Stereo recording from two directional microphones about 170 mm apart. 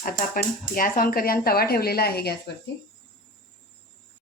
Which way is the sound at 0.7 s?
55° left (ahead or behind).